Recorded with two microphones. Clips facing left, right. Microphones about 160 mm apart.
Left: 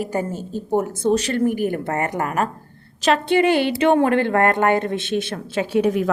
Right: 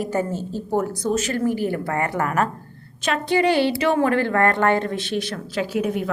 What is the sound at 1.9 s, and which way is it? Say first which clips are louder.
Speech: even; 20° left (ahead or behind).